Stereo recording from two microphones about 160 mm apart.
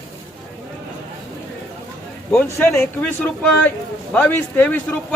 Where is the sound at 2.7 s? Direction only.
10° left (ahead or behind).